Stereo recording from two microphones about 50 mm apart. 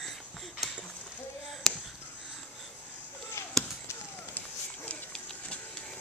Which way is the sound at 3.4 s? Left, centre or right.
Left.